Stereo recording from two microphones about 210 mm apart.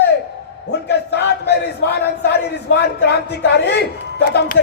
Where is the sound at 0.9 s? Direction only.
50° left (ahead or behind).